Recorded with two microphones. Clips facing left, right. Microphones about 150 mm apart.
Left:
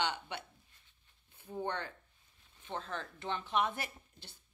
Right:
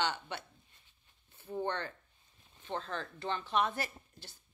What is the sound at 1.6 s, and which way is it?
A woman's voice, 10° left (ahead or behind).